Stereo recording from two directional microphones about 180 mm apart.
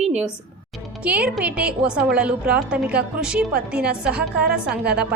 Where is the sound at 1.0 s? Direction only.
5° right (ahead or behind).